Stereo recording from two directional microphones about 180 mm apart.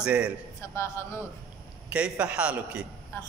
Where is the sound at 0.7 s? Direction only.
15° left (ahead or behind).